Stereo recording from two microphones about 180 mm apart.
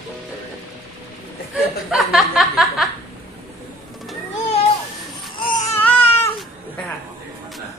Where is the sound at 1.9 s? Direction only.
Centre (ahead or behind).